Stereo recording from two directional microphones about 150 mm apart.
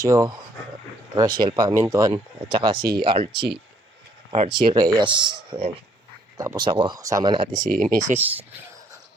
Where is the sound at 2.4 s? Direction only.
35° right (ahead or behind).